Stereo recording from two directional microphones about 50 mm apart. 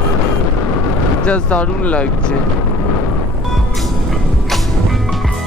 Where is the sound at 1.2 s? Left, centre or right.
Left.